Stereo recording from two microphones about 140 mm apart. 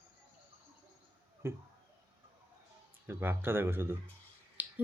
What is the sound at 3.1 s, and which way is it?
Speech, 15° right (ahead or behind).